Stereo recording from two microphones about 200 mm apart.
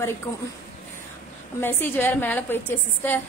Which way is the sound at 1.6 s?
10° left (ahead or behind).